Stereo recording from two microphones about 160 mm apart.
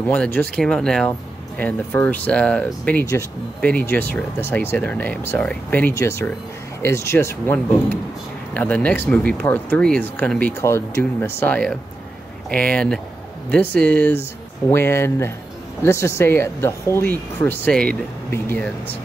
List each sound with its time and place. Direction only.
0.0 s speech: 10° left (ahead or behind)